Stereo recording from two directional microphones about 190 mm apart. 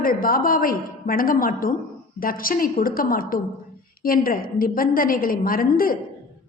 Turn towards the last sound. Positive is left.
turn(degrees=50)  # may be behind; listen again after turning